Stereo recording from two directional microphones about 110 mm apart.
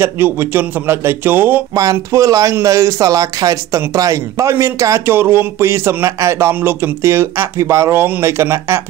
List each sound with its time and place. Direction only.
0.0 s speech: 20° right (ahead or behind)
1.8 s speech: 30° right (ahead or behind)